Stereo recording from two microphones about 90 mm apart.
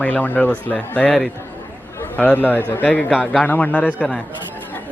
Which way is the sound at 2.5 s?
20° left (ahead or behind).